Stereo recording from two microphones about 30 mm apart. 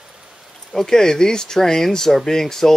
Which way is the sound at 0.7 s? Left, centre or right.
Centre.